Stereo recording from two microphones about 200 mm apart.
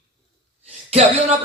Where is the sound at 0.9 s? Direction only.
30° right (ahead or behind).